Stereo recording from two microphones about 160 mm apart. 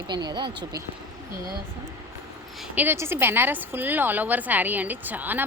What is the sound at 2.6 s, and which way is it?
A woman's voice, 10° right (ahead or behind).